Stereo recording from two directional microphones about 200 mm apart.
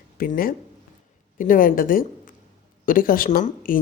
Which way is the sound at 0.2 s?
45° left (ahead or behind).